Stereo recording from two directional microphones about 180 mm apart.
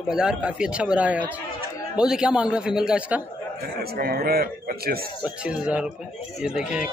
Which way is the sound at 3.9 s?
55° right (ahead or behind).